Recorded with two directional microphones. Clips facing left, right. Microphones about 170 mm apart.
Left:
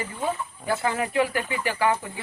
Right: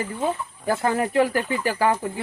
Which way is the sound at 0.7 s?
45° right (ahead or behind).